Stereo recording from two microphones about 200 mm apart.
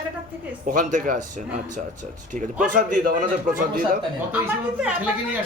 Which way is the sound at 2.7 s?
40° right (ahead or behind).